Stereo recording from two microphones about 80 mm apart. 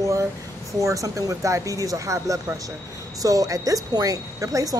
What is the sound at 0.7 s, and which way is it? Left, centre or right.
A woman's voice, right.